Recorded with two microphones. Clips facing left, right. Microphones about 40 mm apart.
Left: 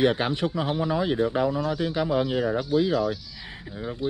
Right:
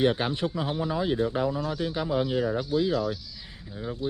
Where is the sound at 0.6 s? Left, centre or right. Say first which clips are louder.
Left 3 dB; left.